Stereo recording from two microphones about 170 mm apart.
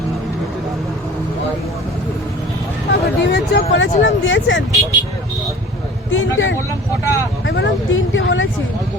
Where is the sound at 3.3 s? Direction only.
90° left.